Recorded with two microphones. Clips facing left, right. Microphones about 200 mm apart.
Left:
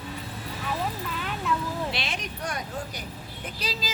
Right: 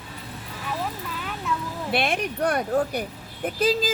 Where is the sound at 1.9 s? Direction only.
55° right (ahead or behind).